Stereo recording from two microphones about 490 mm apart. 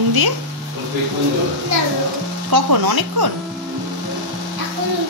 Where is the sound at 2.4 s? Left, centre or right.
Right.